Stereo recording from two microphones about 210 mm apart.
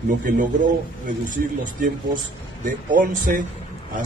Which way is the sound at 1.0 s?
40° right (ahead or behind).